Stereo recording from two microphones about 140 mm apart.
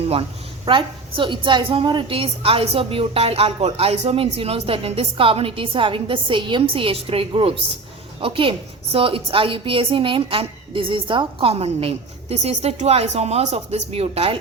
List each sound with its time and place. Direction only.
0.1 s a woman's voice: 40° right (ahead or behind)